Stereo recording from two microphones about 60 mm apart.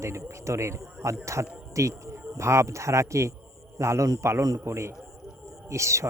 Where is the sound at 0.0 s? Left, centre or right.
Right.